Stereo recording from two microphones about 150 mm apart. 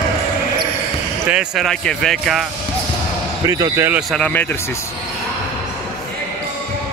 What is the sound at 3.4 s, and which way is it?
Speech, 20° right (ahead or behind).